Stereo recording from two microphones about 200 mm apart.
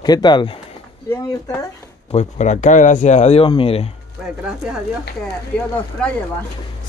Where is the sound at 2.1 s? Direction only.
35° left (ahead or behind).